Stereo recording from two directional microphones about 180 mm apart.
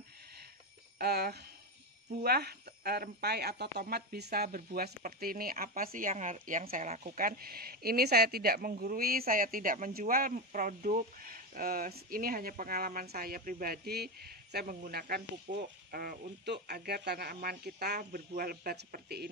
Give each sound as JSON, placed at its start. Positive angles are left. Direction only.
{"t": 0.9, "sound": "speech", "side_deg": -60}